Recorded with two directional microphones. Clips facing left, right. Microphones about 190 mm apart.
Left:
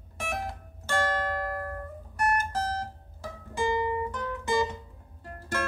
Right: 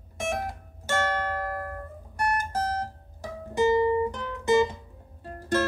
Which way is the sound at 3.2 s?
25° right (ahead or behind).